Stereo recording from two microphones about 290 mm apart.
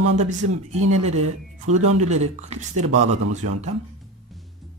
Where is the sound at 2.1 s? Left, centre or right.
Right.